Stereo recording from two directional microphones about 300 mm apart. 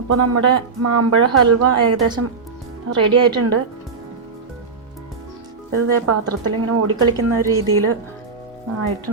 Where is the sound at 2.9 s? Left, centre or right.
Right.